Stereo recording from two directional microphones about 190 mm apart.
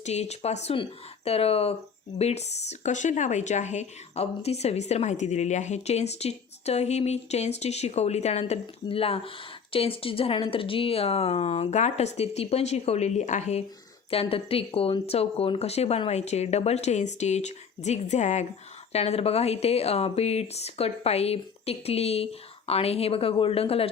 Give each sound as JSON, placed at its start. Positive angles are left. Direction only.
{"t": 0.0, "sound": "speech", "side_deg": 35}